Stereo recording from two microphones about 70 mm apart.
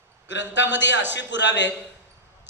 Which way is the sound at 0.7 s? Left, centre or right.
Right.